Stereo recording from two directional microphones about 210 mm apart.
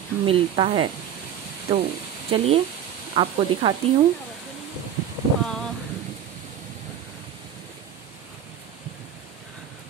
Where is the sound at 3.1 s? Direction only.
25° right (ahead or behind).